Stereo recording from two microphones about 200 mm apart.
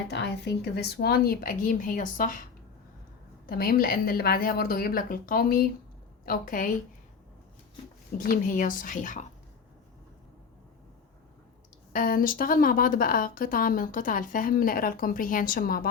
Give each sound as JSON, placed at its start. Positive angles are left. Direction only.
{"t": 0.1, "sound": "a woman's voice", "side_deg": 60}
{"t": 3.4, "sound": "a woman's voice", "side_deg": 45}
{"t": 8.2, "sound": "a woman's voice", "side_deg": 45}
{"t": 11.9, "sound": "a woman's voice", "side_deg": 45}